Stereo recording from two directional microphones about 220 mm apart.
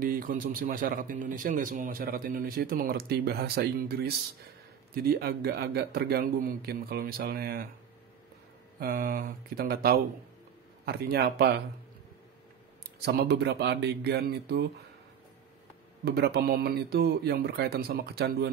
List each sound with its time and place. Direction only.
0.0 s a man's voice: 40° right (ahead or behind)
8.7 s a man's voice: 40° right (ahead or behind)
13.0 s a man's voice: 50° right (ahead or behind)
16.0 s a man's voice: 50° right (ahead or behind)